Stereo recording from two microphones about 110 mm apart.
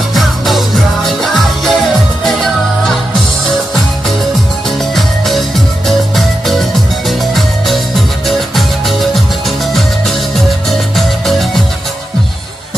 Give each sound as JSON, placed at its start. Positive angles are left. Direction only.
{"t": 0.1, "sound": "music", "side_deg": 0}
{"t": 4.9, "sound": "music", "side_deg": 0}
{"t": 10.7, "sound": "music", "side_deg": 0}